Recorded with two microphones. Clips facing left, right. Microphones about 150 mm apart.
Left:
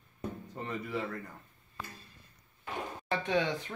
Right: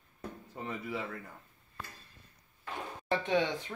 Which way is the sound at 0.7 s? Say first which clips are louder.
Left 2 dB; 5° right (ahead or behind).